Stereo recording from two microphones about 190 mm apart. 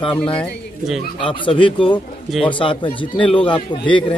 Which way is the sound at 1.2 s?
25° left (ahead or behind).